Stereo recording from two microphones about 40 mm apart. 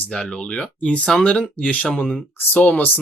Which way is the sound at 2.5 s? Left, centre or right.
Left.